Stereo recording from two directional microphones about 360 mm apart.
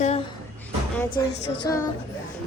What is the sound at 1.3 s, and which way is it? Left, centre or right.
Music, left.